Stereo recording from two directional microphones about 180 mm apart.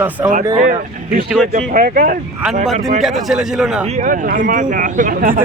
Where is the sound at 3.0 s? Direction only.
Centre (ahead or behind).